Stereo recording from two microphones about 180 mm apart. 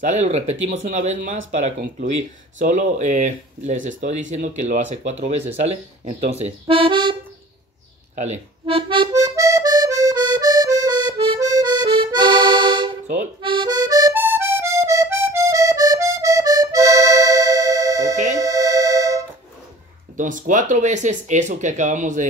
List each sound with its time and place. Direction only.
0.0 s speech: 40° right (ahead or behind)
2.6 s speech: 45° right (ahead or behind); by 7.2 s 25° right (ahead or behind)
8.2 s accordion: 35° right (ahead or behind)
13.0 s speech: 40° right (ahead or behind)
13.4 s music: 25° right (ahead or behind)
18.1 s music: 40° right (ahead or behind)
18.4 s music: 20° right (ahead or behind)
20.2 s speech: 45° right (ahead or behind)